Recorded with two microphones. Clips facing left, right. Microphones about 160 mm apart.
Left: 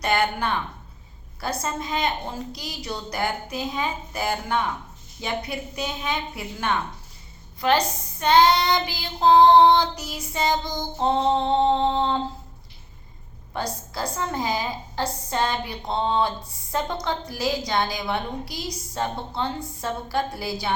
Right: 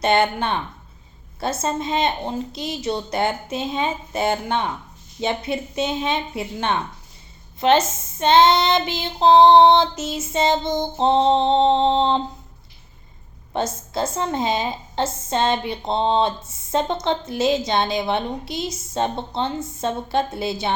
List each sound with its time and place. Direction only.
0.0 s a woman's voice: 25° right (ahead or behind)
13.5 s a woman's voice: 25° right (ahead or behind)